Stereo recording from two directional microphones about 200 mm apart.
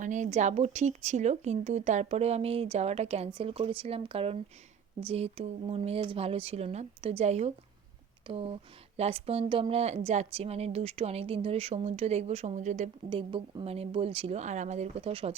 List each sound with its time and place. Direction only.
0.0 s a woman's voice: 40° right (ahead or behind)